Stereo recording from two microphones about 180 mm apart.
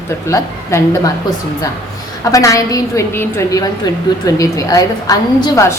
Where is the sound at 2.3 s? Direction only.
20° left (ahead or behind).